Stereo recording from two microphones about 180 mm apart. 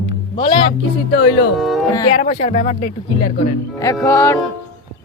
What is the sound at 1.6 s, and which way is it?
Music, centre (ahead or behind).